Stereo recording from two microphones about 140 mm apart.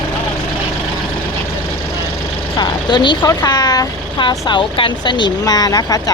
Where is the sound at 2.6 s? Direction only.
35° left (ahead or behind).